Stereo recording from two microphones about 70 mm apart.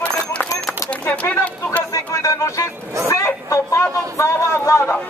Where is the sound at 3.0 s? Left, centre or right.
Left.